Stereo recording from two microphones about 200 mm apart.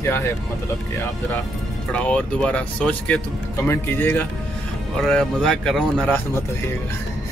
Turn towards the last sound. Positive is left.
turn(degrees=5)  # may be behind; listen again after turning